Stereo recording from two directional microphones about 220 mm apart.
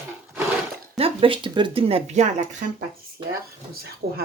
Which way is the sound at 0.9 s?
25° right (ahead or behind).